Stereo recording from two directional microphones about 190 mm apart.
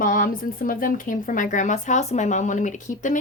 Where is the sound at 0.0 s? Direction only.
45° left (ahead or behind).